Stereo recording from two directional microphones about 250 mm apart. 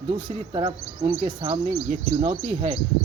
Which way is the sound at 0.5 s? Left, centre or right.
Centre.